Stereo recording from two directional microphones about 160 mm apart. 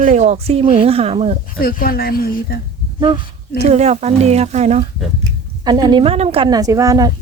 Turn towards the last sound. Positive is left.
turn(degrees=-20)  # may be behind; listen again after turning